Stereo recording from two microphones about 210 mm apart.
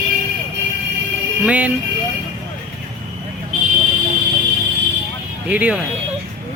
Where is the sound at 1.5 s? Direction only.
5° right (ahead or behind).